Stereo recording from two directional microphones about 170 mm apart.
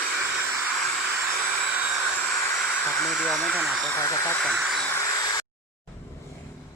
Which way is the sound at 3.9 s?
15° left (ahead or behind).